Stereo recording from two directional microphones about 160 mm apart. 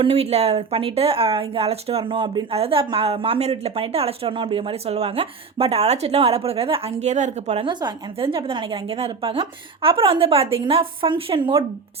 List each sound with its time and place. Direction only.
0.0 s speech: 40° right (ahead or behind)
7.7 s speech: 30° right (ahead or behind)